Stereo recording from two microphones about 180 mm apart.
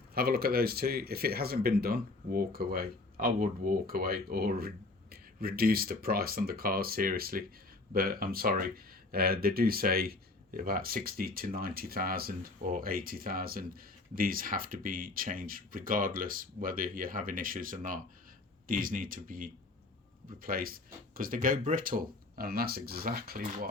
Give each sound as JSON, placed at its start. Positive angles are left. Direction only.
{"t": 0.1, "sound": "speech", "side_deg": -55}